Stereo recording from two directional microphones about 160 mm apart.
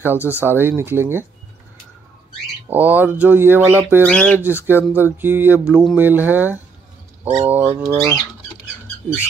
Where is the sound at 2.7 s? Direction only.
10° right (ahead or behind).